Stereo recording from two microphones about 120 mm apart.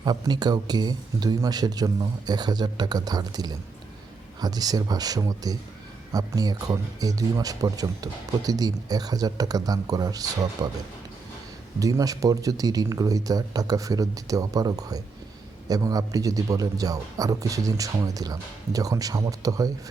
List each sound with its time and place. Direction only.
0.0 s speech: 35° right (ahead or behind)
11.8 s a man's voice: 30° right (ahead or behind)